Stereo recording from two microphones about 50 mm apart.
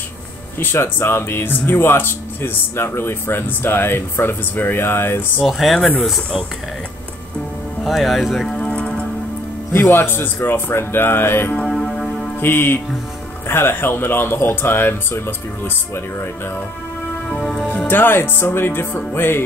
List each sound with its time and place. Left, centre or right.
0.6 s speech: left
5.4 s speech: centre
7.8 s speech: centre
8.5 s music: left
9.7 s speech: left
11.7 s music: centre
12.4 s speech: left
17.6 s speech: left